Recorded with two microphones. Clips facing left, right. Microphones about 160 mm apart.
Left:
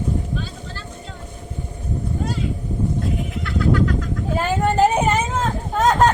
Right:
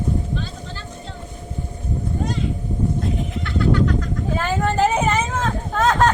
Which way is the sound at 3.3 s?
Centre (ahead or behind).